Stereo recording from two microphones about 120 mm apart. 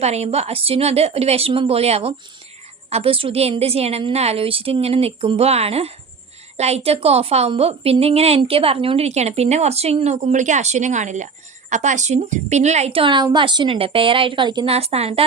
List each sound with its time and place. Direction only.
0.0 s a woman's voice: 60° right (ahead or behind)